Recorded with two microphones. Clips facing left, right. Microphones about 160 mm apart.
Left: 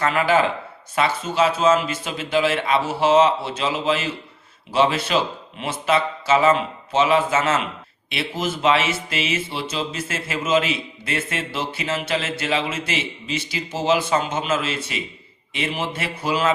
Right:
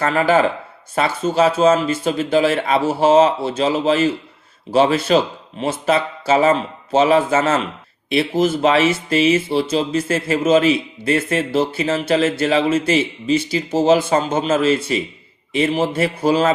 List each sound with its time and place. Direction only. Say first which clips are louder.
0.0 s speech: right 3 dB; 35° right (ahead or behind)
13.9 s speech: right 2 dB; 45° right (ahead or behind)